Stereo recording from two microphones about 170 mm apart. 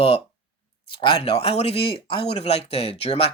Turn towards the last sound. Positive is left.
turn(degrees=35)  # may be behind; listen again after turning